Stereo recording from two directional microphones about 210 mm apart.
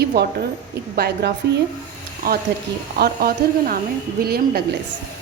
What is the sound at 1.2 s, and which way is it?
Speech, 55° right (ahead or behind).